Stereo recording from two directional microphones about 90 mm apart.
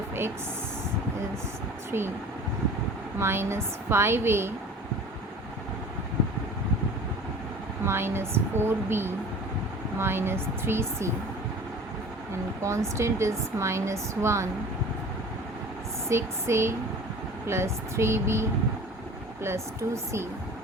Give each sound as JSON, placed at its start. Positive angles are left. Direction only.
{"t": 3.2, "sound": "a woman's voice", "side_deg": -30}
{"t": 7.9, "sound": "a woman's voice", "side_deg": -25}
{"t": 12.6, "sound": "a woman's voice", "side_deg": -35}
{"t": 16.0, "sound": "a woman's voice", "side_deg": -30}